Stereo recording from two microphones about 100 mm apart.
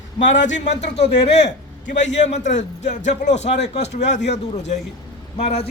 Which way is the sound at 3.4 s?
90° left.